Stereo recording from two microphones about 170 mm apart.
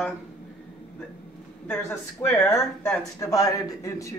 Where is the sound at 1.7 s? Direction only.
15° left (ahead or behind).